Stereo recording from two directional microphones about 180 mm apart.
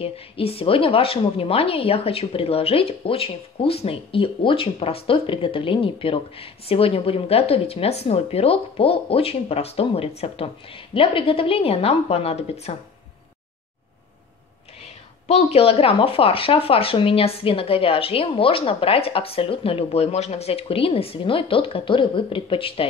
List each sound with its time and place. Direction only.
0.0 s a woman's voice: 30° left (ahead or behind)
14.8 s a woman's voice: 35° left (ahead or behind)